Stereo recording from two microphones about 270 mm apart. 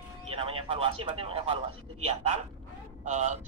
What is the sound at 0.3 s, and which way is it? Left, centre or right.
A man's voice, right.